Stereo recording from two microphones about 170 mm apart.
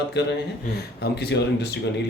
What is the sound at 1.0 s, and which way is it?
Speech, 70° left (ahead or behind).